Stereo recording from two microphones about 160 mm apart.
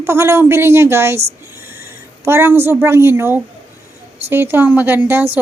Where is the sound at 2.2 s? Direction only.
15° right (ahead or behind).